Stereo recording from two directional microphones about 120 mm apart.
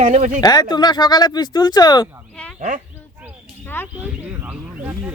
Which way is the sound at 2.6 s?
90° right.